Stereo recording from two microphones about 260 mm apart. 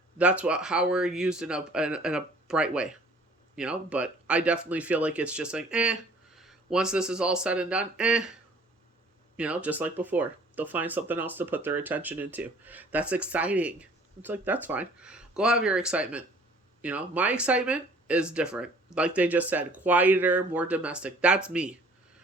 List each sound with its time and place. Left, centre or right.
0.2 s speech: centre
9.4 s speech: centre